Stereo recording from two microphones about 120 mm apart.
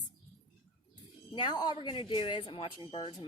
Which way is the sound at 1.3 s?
40° left (ahead or behind).